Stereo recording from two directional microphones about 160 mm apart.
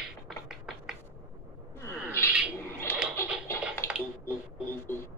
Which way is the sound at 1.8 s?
15° left (ahead or behind).